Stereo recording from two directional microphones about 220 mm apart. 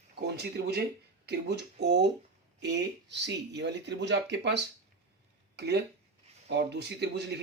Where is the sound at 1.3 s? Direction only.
50° right (ahead or behind).